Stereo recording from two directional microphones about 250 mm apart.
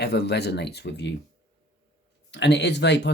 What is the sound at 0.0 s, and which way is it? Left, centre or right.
Speech, left.